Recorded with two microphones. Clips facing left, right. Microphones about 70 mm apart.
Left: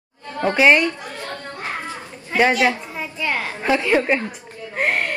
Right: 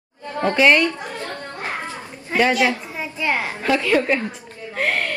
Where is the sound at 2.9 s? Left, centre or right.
Centre.